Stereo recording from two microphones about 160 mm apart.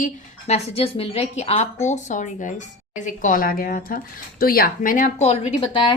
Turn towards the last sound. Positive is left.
turn(degrees=35)  # may be behind; listen again after turning